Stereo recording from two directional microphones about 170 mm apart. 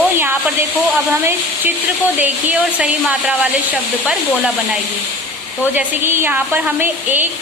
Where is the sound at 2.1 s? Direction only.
10° right (ahead or behind).